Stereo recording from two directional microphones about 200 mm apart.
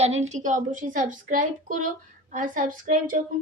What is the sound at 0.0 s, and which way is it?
A woman's voice, 35° right (ahead or behind).